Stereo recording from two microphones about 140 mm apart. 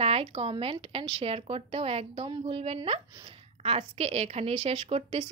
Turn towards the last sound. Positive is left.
turn(degrees=-45)  # may be behind; listen again after turning